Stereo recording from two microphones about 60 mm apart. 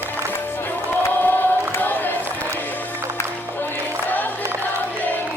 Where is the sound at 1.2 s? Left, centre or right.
Left.